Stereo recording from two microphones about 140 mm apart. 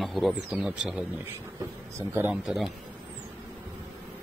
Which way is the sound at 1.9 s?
15° right (ahead or behind).